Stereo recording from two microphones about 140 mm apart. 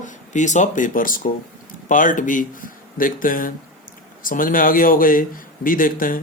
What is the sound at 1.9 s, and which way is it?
A man's voice, 70° left (ahead or behind).